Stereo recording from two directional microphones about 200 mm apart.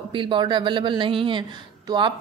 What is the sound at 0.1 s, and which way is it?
Speech, 25° right (ahead or behind).